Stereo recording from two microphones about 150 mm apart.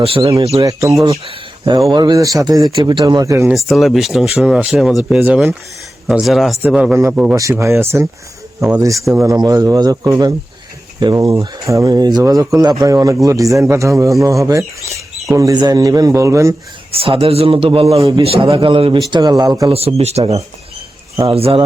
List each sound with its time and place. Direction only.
0.0 s a man's voice: 40° right (ahead or behind)
0.6 s speech: 20° right (ahead or behind)
1.2 s speech: 35° right (ahead or behind)
3.5 s speech: centre (ahead or behind)
7.3 s speech: 20° right (ahead or behind)
16.9 s a man's voice: 40° right (ahead or behind)
19.7 s a man's voice: 45° right (ahead or behind)